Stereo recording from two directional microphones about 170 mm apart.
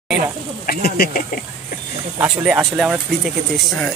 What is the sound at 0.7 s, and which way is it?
Snake, 65° left (ahead or behind).